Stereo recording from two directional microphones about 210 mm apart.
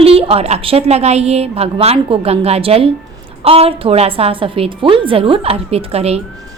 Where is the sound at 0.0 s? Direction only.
25° right (ahead or behind).